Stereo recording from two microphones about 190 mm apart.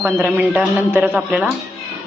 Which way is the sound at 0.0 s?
10° right (ahead or behind).